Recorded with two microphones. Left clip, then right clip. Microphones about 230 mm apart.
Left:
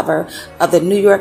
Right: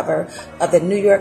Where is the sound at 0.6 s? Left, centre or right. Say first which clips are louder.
Left 3 dB; left.